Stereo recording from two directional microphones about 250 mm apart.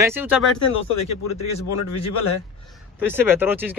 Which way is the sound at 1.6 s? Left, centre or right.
Left.